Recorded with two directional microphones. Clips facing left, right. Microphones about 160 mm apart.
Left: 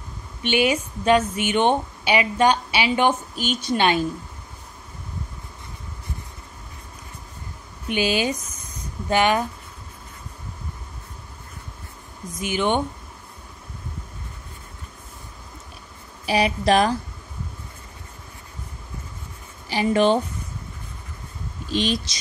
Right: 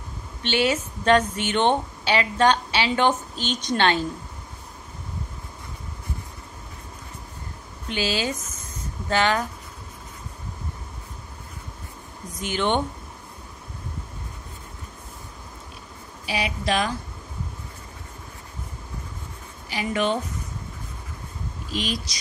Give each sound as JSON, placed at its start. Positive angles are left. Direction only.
{"t": 0.4, "sound": "a woman's voice", "side_deg": 15}
{"t": 7.9, "sound": "a woman's voice", "side_deg": 15}
{"t": 12.4, "sound": "a woman's voice", "side_deg": 10}
{"t": 16.3, "sound": "a woman's voice", "side_deg": 40}
{"t": 19.7, "sound": "a woman's voice", "side_deg": 35}
{"t": 21.7, "sound": "speech", "side_deg": 25}